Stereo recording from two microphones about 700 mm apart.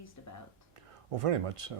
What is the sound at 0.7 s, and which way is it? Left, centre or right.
Speech, right.